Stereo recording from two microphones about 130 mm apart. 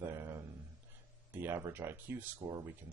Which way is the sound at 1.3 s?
15° right (ahead or behind).